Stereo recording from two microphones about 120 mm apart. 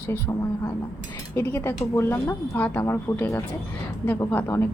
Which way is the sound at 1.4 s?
20° left (ahead or behind).